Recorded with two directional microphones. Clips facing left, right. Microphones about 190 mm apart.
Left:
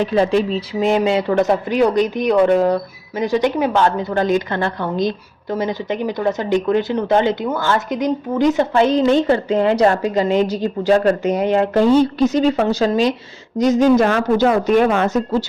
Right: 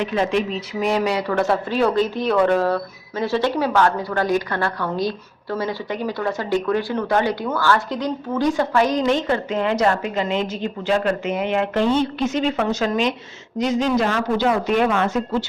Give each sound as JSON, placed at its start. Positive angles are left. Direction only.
{"t": 0.0, "sound": "a woman's voice", "side_deg": 35}